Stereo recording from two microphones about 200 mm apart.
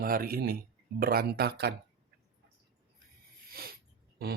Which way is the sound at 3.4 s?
50° right (ahead or behind).